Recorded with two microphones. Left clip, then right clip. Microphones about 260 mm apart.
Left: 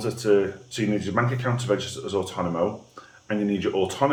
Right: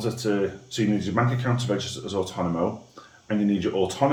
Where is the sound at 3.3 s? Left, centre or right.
Centre.